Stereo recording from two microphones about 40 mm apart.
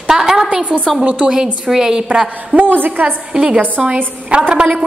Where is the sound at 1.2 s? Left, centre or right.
Centre.